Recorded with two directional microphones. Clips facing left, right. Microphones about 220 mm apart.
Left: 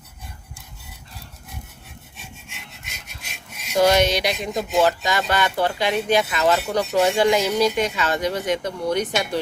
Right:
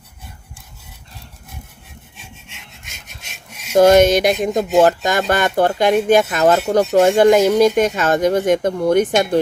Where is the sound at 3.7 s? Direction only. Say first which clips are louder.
Right 7 dB; 50° right (ahead or behind).